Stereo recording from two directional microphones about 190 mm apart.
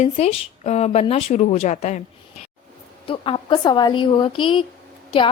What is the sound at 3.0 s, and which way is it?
A woman's voice, 30° left (ahead or behind).